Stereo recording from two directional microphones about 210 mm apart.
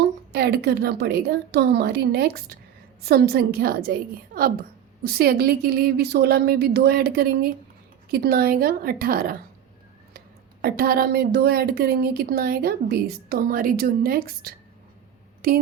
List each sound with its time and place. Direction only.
0.0 s speech: 50° right (ahead or behind)